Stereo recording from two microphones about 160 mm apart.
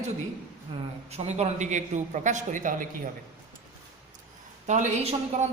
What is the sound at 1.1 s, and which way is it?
A woman's voice, 40° right (ahead or behind).